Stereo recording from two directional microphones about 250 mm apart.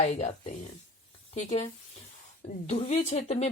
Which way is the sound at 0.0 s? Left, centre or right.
Left.